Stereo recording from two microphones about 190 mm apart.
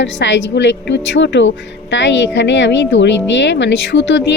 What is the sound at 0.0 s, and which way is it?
A woman's voice, 75° left (ahead or behind).